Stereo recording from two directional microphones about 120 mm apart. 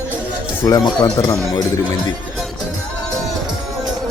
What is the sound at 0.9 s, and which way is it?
Speech, 35° left (ahead or behind).